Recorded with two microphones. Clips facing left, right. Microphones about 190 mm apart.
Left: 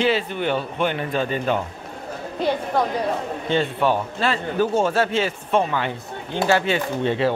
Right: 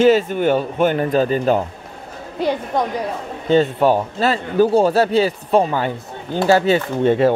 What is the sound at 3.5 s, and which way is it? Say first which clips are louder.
Speech: right 6 dB; 40° right (ahead or behind).